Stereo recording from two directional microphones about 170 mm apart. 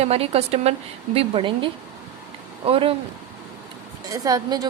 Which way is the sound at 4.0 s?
20° right (ahead or behind).